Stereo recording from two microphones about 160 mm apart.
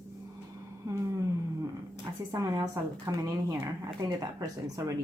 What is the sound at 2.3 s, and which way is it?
Speech, 20° right (ahead or behind).